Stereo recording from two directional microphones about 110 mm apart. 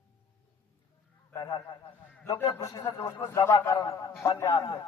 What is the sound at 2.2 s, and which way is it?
A man's voice, 35° left (ahead or behind).